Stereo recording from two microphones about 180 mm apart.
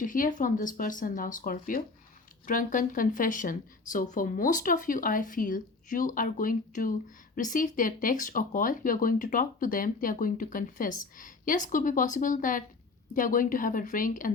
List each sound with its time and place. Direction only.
0.0 s speech: 50° left (ahead or behind)